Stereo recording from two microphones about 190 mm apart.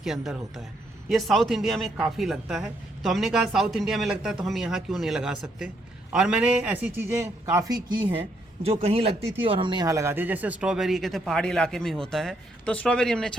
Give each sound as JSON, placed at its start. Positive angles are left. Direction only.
{"t": 0.0, "sound": "a man's voice", "side_deg": 0}
{"t": 8.6, "sound": "a man's voice", "side_deg": -30}